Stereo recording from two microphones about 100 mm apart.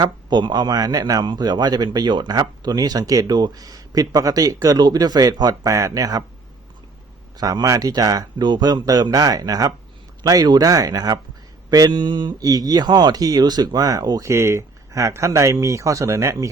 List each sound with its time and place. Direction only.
0.0 s speech: 45° right (ahead or behind)
7.3 s speech: 40° right (ahead or behind)